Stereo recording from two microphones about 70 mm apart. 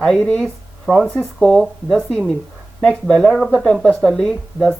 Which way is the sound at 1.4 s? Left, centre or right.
Centre.